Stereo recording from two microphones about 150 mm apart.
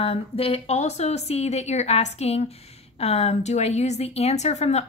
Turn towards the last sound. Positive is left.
turn(degrees=45)  # may be behind; listen again after turning